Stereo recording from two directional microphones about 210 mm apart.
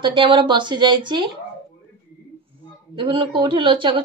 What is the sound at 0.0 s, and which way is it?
A woman's voice, 25° right (ahead or behind).